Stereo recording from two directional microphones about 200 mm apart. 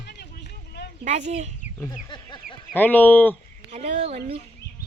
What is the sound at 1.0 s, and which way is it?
Speech, 35° right (ahead or behind).